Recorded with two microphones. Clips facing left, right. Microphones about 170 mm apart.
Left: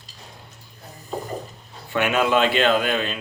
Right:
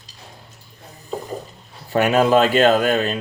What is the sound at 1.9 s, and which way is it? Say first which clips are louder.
Speech: right 5 dB; 40° right (ahead or behind).